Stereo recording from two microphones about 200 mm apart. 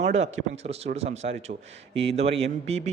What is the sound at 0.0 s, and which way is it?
Speech, 35° right (ahead or behind).